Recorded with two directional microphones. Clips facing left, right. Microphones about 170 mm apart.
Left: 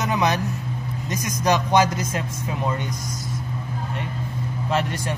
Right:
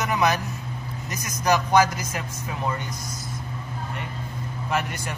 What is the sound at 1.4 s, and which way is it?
Speech, 20° left (ahead or behind).